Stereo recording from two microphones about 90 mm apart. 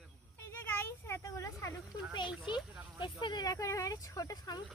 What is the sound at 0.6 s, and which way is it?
Speech, 25° left (ahead or behind).